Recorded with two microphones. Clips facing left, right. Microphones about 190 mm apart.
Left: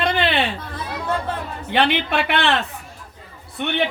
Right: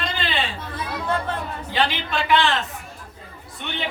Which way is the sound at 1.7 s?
65° left (ahead or behind).